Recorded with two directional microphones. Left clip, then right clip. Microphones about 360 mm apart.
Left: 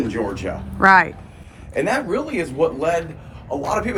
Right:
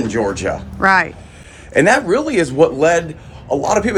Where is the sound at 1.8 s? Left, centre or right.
Centre.